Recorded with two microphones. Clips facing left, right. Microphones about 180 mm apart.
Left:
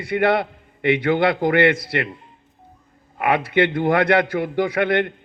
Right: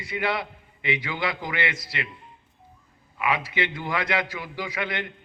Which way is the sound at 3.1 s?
60° left (ahead or behind).